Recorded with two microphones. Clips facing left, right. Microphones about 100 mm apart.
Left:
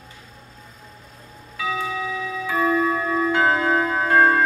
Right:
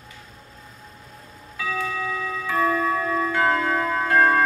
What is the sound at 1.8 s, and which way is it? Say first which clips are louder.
Clock: left 1 dB; 10° left (ahead or behind).